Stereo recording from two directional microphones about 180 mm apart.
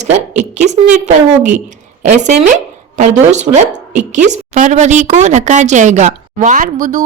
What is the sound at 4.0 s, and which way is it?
A woman's voice, 40° right (ahead or behind).